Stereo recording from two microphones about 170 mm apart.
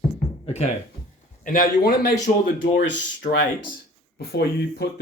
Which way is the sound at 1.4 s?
55° left (ahead or behind).